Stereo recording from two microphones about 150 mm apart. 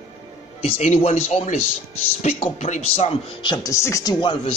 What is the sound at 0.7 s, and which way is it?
A man's voice, 45° left (ahead or behind).